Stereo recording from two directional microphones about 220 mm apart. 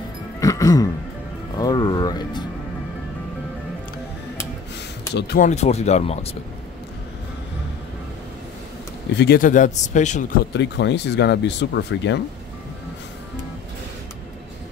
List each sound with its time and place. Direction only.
0.4 s throat clearing: 15° left (ahead or behind)
1.6 s speech: 20° left (ahead or behind)
5.1 s speech: 45° left (ahead or behind)
5.5 s speech: 30° left (ahead or behind)
9.1 s speech: 45° left (ahead or behind)
10.5 s speech: 50° left (ahead or behind)